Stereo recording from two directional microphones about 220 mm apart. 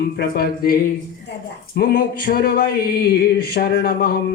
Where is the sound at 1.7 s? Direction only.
40° left (ahead or behind).